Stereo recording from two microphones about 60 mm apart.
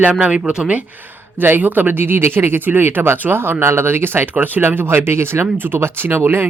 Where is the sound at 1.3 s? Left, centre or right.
Right.